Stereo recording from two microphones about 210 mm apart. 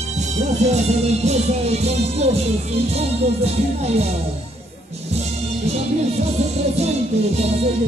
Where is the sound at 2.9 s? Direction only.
30° right (ahead or behind).